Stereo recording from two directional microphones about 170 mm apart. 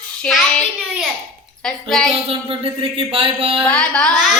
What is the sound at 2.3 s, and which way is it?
Speech, 30° right (ahead or behind).